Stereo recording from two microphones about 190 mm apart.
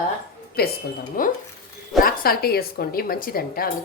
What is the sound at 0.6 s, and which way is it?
A woman's voice, 55° left (ahead or behind).